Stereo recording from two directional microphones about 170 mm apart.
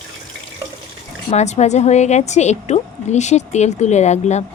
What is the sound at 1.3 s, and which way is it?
A woman's voice, 40° left (ahead or behind).